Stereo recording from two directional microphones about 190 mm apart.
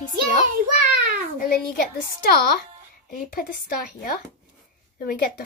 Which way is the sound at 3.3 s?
50° left (ahead or behind).